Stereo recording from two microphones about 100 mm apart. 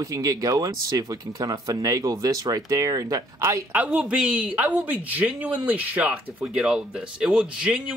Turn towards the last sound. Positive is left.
turn(degrees=-10)  # may be behind; listen again after turning